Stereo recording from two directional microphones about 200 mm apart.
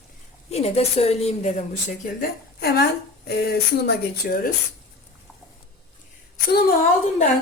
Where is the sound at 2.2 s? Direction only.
50° left (ahead or behind).